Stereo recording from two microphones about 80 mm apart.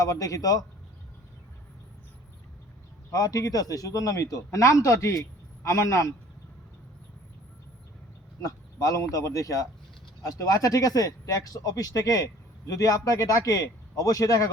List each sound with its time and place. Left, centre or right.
0.0 s speech: left
3.1 s a man's voice: left
8.4 s speech: left